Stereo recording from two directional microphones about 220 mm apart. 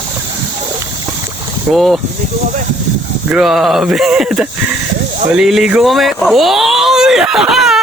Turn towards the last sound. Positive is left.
turn(degrees=0)  # may be behind; listen again after turning